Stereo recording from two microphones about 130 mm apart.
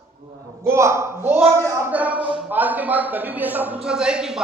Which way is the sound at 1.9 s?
10° right (ahead or behind).